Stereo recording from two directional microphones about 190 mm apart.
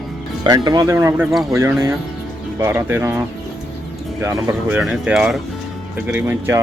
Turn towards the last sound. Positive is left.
turn(degrees=-10)  # may be behind; listen again after turning